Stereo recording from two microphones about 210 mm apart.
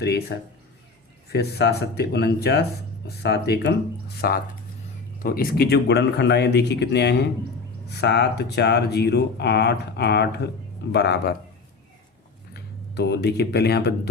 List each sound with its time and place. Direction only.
0.0 s speech: 50° left (ahead or behind)
12.5 s speech: 50° left (ahead or behind)